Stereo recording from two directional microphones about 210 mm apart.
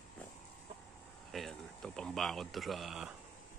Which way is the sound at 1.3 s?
Centre (ahead or behind).